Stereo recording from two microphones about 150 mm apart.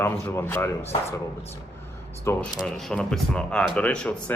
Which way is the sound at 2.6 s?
5° left (ahead or behind).